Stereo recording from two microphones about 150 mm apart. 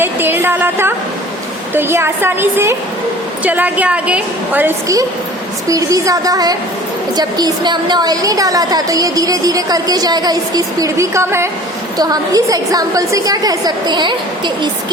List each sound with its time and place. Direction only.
0.0 s a woman's voice: 15° right (ahead or behind); by 14.7 s 30° right (ahead or behind)